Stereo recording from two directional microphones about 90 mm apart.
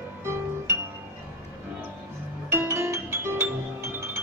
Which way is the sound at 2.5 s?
30° right (ahead or behind).